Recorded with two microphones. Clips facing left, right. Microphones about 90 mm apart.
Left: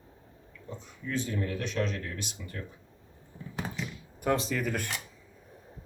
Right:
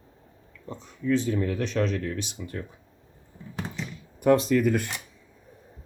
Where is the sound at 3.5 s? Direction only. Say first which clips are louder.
Right 2 dB; centre (ahead or behind).